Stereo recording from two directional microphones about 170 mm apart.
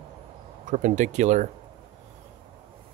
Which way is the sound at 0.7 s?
45° right (ahead or behind).